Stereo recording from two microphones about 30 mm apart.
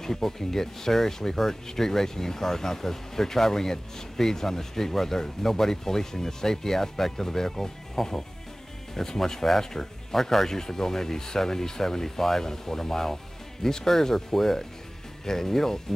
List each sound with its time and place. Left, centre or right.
0.0 s speech: centre